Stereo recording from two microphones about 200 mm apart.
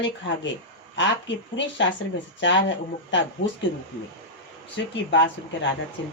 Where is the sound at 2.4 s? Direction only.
65° left (ahead or behind).